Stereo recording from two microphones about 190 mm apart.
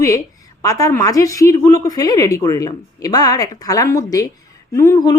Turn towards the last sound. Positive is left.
turn(degrees=20)  # may be behind; listen again after turning